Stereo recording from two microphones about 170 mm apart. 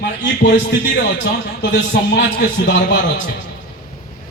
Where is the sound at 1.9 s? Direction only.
80° left.